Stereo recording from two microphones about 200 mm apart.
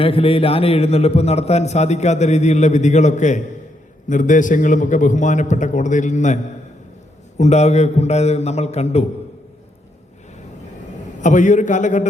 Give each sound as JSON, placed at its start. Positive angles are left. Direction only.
{"t": 0.0, "sound": "a man's voice", "side_deg": 30}
{"t": 11.2, "sound": "a man's voice", "side_deg": 40}